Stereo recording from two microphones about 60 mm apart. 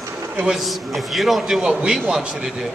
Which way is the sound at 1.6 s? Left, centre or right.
Centre.